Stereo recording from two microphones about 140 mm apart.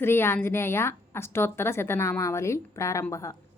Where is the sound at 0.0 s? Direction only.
15° left (ahead or behind).